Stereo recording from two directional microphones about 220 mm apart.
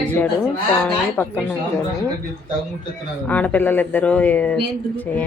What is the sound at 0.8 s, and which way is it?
Speech, 10° left (ahead or behind).